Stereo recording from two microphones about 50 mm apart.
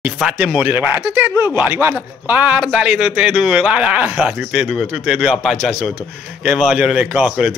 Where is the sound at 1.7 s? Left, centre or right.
Right.